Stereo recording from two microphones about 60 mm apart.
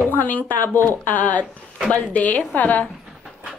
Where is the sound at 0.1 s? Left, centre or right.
Left.